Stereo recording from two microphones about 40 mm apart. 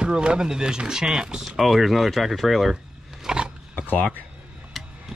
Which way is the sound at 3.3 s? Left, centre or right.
Right.